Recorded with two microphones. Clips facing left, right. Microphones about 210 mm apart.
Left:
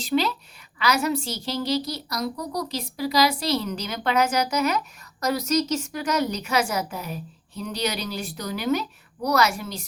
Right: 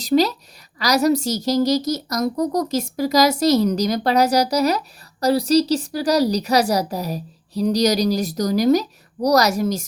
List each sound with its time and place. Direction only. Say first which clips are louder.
0.0 s a woman's voice: right 6 dB; 40° right (ahead or behind)